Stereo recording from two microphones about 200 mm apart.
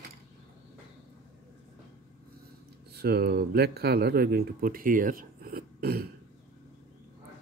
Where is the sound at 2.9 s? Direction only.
50° right (ahead or behind).